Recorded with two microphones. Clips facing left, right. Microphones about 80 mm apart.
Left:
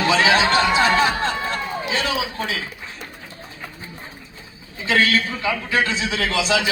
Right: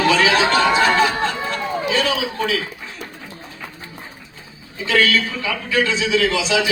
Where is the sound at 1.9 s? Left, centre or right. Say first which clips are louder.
Right 3 dB; left.